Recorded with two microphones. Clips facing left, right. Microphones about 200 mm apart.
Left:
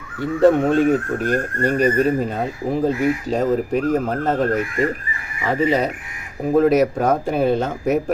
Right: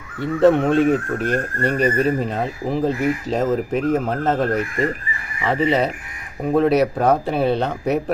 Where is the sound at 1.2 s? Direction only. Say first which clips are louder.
Left 1 dB; 40° left (ahead or behind).